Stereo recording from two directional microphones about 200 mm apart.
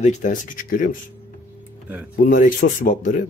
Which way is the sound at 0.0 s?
40° left (ahead or behind).